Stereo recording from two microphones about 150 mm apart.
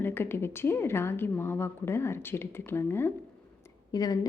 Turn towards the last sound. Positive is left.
turn(degrees=25)  # may be behind; listen again after turning